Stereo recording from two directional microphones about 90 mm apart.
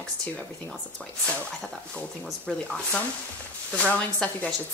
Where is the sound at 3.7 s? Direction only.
15° left (ahead or behind).